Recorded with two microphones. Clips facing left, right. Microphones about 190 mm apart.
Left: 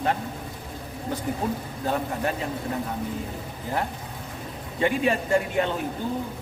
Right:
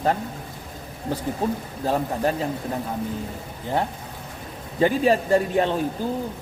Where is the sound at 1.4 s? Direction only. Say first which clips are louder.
Right 3 dB; 30° right (ahead or behind).